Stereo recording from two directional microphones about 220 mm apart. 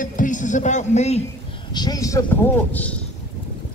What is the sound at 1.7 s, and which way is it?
Speech, 15° left (ahead or behind).